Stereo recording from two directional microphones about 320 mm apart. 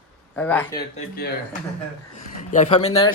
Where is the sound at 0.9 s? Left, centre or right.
Left.